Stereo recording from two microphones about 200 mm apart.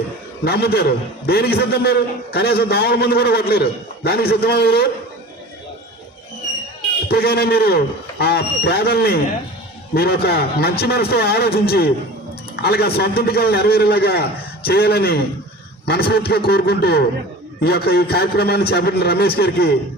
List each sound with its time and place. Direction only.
0.4 s a man's voice: 50° left (ahead or behind)
7.1 s a man's voice: 50° left (ahead or behind)